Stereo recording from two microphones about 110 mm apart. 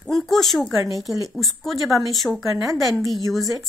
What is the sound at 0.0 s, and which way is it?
Speech, 5° left (ahead or behind).